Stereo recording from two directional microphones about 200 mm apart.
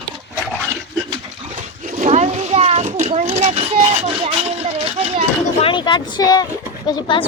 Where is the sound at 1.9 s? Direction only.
35° right (ahead or behind).